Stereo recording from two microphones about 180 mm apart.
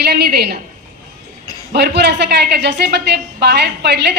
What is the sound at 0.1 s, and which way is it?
Speech, 65° right (ahead or behind).